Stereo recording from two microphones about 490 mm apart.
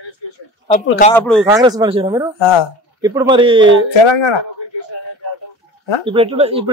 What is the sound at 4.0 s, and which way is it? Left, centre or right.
Speech, left.